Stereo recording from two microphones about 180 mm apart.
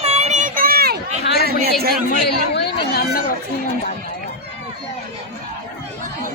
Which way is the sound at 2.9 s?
60° left (ahead or behind).